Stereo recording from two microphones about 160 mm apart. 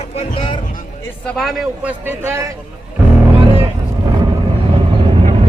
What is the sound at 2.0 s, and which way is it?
Speech, 15° right (ahead or behind).